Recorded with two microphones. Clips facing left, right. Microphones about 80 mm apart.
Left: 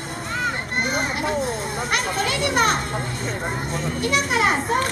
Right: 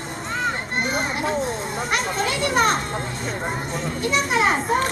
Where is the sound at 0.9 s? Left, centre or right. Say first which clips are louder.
Even; centre.